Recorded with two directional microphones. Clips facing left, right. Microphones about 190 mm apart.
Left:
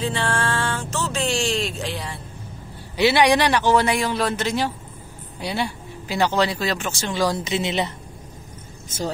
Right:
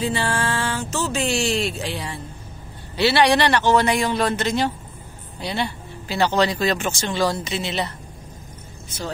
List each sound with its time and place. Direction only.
0.0 s speech: 10° right (ahead or behind)
3.0 s speech: 15° left (ahead or behind)
8.8 s speech: 45° left (ahead or behind)